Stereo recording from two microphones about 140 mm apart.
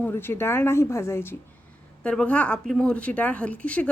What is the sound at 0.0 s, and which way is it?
Speech, 15° left (ahead or behind).